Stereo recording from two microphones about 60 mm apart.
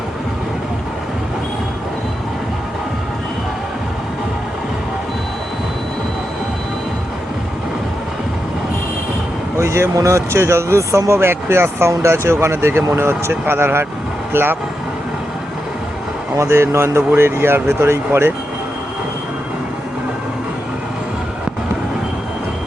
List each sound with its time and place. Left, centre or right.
9.6 s speech: right
16.3 s speech: right